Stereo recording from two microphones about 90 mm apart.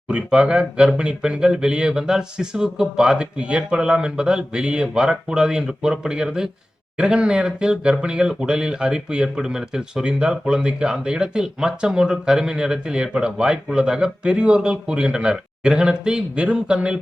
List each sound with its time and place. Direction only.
0.1 s speech: 10° right (ahead or behind)